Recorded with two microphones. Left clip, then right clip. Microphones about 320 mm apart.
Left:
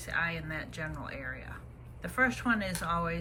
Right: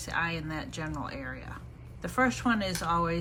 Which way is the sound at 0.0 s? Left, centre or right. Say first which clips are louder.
Right 1 dB; centre.